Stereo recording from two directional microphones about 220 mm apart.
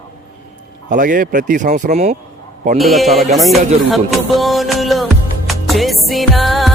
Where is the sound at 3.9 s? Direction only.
Centre (ahead or behind).